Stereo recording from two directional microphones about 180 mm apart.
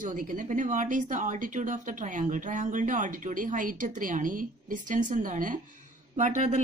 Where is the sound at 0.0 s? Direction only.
45° right (ahead or behind).